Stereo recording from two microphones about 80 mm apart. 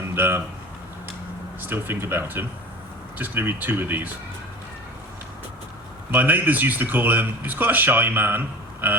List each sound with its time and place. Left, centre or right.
0.2 s speech: right
1.6 s speech: right
6.1 s speech: right